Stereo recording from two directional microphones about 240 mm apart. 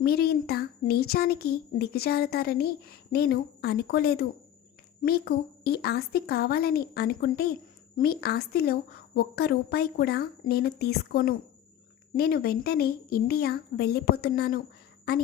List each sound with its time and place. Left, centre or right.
0.0 s speech: left